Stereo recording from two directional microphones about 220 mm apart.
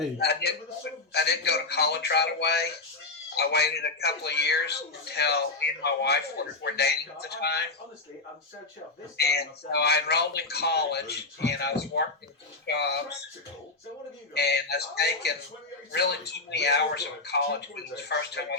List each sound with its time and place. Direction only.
0.2 s a man's voice: 45° left (ahead or behind)
9.1 s a man's voice: 45° left (ahead or behind)
14.3 s a man's voice: 50° left (ahead or behind)